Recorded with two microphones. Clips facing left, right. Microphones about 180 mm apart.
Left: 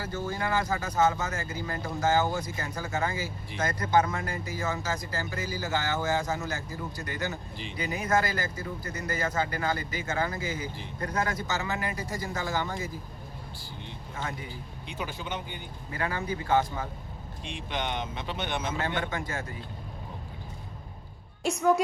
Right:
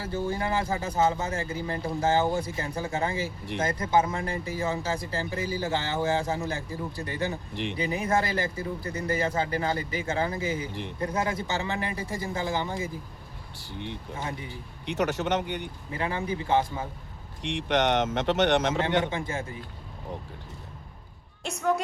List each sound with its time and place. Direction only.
0.0 s speech: 30° right (ahead or behind)
7.5 s speech: 70° right (ahead or behind)
7.8 s speech: 30° right (ahead or behind)
13.7 s speech: 65° right (ahead or behind)
15.9 s speech: 25° right (ahead or behind)
17.4 s speech: 75° right (ahead or behind)
18.9 s speech: 25° right (ahead or behind)